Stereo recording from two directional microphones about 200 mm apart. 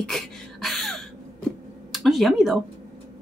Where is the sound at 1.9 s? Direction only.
Centre (ahead or behind).